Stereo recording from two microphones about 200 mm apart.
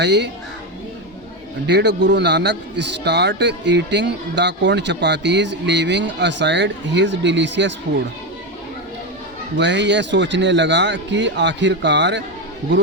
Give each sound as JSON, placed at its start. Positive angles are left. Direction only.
{"t": 0.0, "sound": "a man's voice", "side_deg": -60}
{"t": 1.6, "sound": "a man's voice", "side_deg": -60}
{"t": 9.6, "sound": "a man's voice", "side_deg": -60}